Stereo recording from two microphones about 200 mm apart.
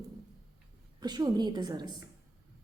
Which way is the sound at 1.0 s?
20° right (ahead or behind).